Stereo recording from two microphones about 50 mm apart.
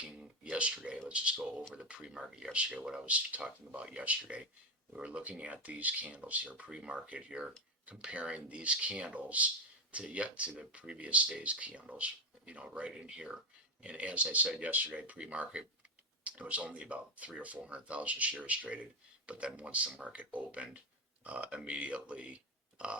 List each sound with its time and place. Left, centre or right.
0.5 s speech: right